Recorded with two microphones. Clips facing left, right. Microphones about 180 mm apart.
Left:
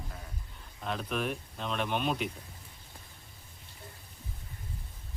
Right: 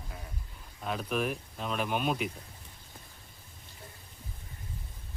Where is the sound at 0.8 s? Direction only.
5° right (ahead or behind).